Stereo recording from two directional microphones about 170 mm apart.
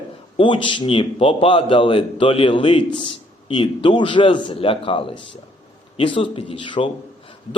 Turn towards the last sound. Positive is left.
turn(degrees=30)  # may be behind; listen again after turning